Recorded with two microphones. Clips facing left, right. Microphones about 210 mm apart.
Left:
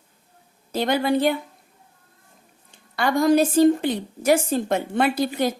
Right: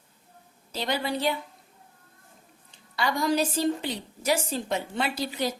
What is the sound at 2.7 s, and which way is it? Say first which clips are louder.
A woman's voice: left 6 dB; 50° left (ahead or behind).